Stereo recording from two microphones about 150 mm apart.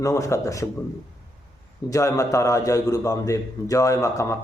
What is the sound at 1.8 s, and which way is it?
Speech, 20° left (ahead or behind).